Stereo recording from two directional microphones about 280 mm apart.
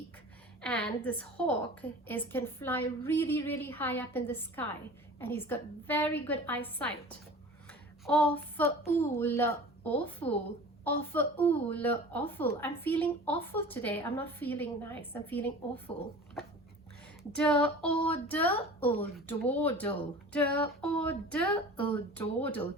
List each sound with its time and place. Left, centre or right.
0.6 s a woman's voice: centre
7.7 s a sound: centre
8.9 s a woman's voice: centre
17.3 s a woman's voice: centre